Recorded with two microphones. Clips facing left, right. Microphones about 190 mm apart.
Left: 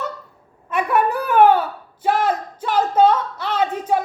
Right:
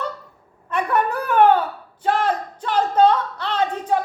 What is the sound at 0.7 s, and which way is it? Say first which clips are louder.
Wail: left 2 dB; 10° left (ahead or behind).